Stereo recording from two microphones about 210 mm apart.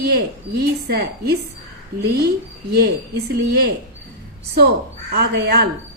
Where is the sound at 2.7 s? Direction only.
50° right (ahead or behind).